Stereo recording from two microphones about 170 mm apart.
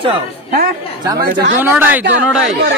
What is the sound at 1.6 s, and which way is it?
Speech, 10° right (ahead or behind).